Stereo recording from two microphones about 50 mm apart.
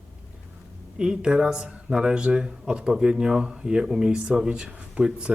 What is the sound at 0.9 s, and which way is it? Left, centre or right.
Speech, centre.